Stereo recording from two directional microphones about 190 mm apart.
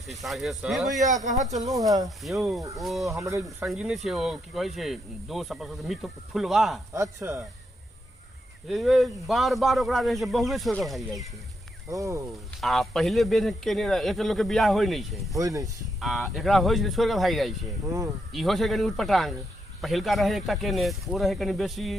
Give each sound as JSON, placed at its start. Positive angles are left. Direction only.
{"t": 0.1, "sound": "speech", "side_deg": 0}
{"t": 1.8, "sound": "speech", "side_deg": -20}
{"t": 2.0, "sound": "speech", "side_deg": 0}
{"t": 6.9, "sound": "speech", "side_deg": -15}
{"t": 8.6, "sound": "speech", "side_deg": 0}
{"t": 11.9, "sound": "speech", "side_deg": -15}
{"t": 12.5, "sound": "speech", "side_deg": 0}
{"t": 15.4, "sound": "speech", "side_deg": -15}
{"t": 16.0, "sound": "speech", "side_deg": 0}